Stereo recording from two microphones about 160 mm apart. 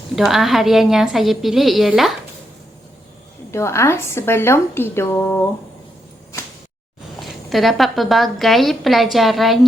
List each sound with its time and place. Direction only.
0.2 s a woman's voice: centre (ahead or behind)
3.5 s a woman's voice: 15° left (ahead or behind)
7.2 s a woman's voice: centre (ahead or behind)